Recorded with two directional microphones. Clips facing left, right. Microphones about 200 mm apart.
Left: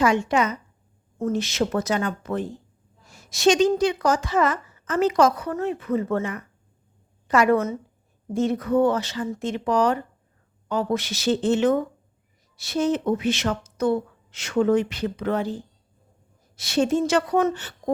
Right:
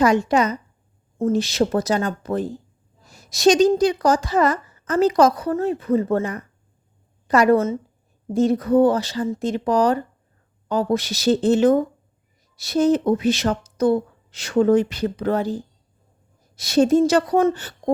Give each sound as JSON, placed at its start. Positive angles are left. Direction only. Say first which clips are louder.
{"t": 0.0, "sound": "speech", "louder": "right 3 dB", "side_deg": -40}
{"t": 3.1, "sound": "a sound", "louder": "right 3 dB", "side_deg": -35}
{"t": 3.8, "sound": "speech", "louder": "right 3 dB", "side_deg": -35}